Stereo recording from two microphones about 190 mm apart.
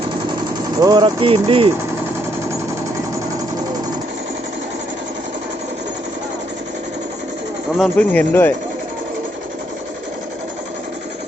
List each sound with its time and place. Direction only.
0.8 s speech: 20° right (ahead or behind)
7.8 s speech: 5° left (ahead or behind)